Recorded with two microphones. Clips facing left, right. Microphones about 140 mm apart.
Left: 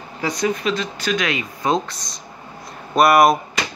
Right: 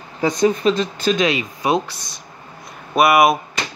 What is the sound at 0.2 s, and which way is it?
Speech, 30° right (ahead or behind).